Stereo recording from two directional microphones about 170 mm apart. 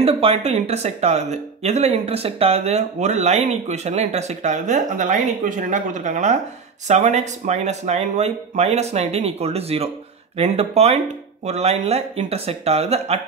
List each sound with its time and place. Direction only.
0.0 s speech: 35° right (ahead or behind)